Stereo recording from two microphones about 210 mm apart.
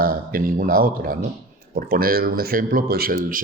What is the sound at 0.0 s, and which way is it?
A man's voice, 40° right (ahead or behind).